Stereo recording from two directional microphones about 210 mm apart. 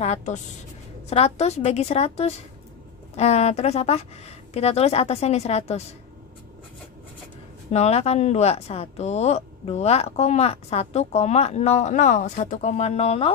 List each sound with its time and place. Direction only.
0.0 s a woman's voice: 30° left (ahead or behind)
7.7 s speech: 30° left (ahead or behind)